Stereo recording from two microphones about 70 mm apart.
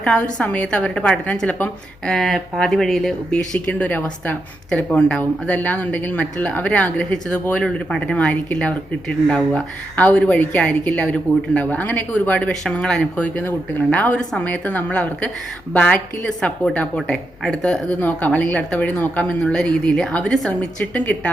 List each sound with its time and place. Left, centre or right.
0.0 s speech: centre
2.0 s speech: centre
3.3 s speech: centre
4.9 s speech: centre
13.2 s speech: left